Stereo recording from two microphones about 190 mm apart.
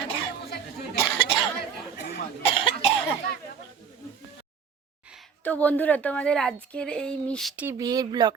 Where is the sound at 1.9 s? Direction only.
60° left (ahead or behind).